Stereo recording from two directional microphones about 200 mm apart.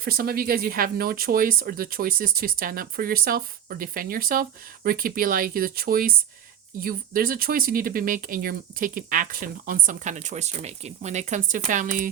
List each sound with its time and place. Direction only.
0.0 s speech: 50° right (ahead or behind)